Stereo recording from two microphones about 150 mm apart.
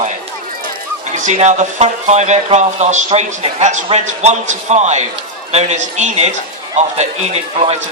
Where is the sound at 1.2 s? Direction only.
50° right (ahead or behind).